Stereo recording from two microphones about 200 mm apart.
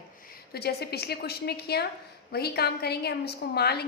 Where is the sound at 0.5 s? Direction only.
55° left (ahead or behind).